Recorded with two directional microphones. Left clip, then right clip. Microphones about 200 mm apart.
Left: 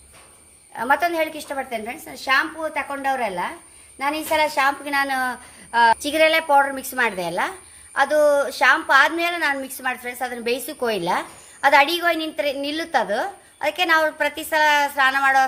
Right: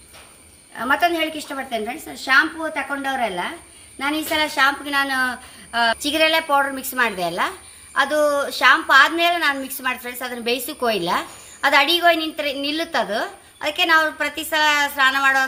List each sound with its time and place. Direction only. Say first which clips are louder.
0.8 s a woman's voice: right 1 dB; 35° left (ahead or behind)